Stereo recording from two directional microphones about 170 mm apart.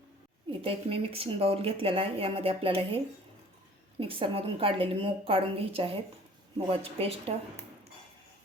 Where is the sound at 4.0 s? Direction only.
30° right (ahead or behind).